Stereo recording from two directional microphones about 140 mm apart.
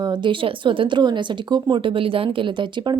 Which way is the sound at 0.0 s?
30° right (ahead or behind).